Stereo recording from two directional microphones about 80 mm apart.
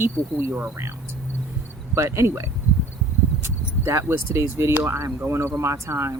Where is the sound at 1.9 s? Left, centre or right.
Right.